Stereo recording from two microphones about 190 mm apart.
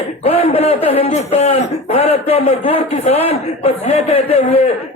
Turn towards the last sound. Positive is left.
turn(degrees=30)  # may be behind; listen again after turning